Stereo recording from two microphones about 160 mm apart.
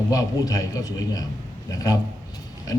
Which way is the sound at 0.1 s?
20° left (ahead or behind).